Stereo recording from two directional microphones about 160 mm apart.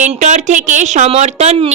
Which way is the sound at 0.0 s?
50° right (ahead or behind).